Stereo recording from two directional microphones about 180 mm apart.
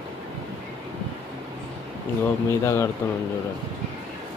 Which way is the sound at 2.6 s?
15° left (ahead or behind).